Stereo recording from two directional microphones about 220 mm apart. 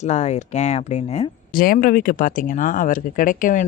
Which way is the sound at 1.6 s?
40° left (ahead or behind).